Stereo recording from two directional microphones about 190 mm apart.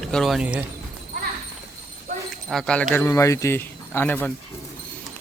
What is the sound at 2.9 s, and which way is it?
Speech, 15° left (ahead or behind).